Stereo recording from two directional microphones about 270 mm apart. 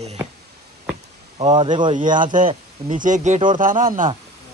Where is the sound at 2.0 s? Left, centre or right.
Right.